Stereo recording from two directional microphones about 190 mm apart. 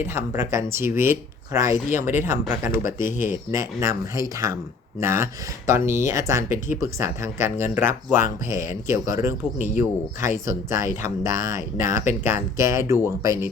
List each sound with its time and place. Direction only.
0.0 s speech: 10° right (ahead or behind)
2.7 s speech: 45° left (ahead or behind)
3.5 s speech: 15° right (ahead or behind)